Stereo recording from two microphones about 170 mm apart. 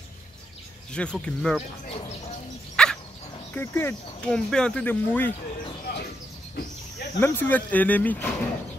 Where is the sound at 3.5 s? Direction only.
15° left (ahead or behind).